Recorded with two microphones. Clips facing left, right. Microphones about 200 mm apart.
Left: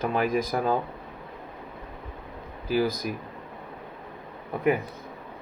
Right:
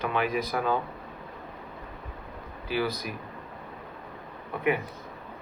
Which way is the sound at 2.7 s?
45° left (ahead or behind).